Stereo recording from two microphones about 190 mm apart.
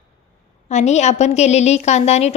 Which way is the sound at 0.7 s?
35° left (ahead or behind).